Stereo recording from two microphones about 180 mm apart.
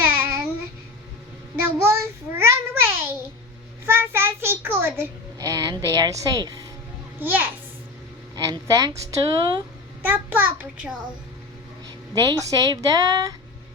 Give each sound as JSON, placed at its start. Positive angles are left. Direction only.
{"t": 0.0, "sound": "child singing", "side_deg": -10}
{"t": 1.6, "sound": "child singing", "side_deg": -15}
{"t": 3.8, "sound": "a child's voice", "side_deg": -10}
{"t": 7.2, "sound": "a child's voice", "side_deg": -10}
{"t": 10.0, "sound": "a child's voice", "side_deg": -10}
{"t": 12.2, "sound": "a woman's voice", "side_deg": -20}